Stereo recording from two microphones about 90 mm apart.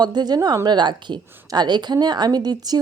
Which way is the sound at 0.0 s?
50° right (ahead or behind).